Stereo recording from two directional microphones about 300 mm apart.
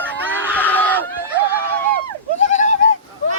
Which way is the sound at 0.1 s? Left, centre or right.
Centre.